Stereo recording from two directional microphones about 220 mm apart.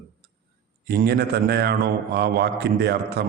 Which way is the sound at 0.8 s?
45° right (ahead or behind).